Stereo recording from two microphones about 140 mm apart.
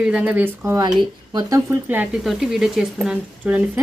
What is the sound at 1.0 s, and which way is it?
Speech, 30° right (ahead or behind).